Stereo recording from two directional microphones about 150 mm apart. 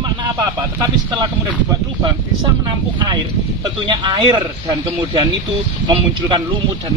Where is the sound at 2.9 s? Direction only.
30° right (ahead or behind).